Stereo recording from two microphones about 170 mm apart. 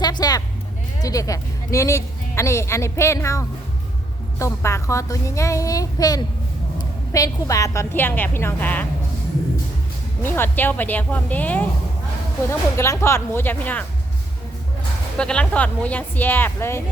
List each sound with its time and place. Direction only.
0.0 s a sound: 25° left (ahead or behind)
1.0 s a woman's voice: 20° left (ahead or behind)
10.2 s a woman's voice: 10° left (ahead or behind)
15.2 s a woman's voice: 5° left (ahead or behind)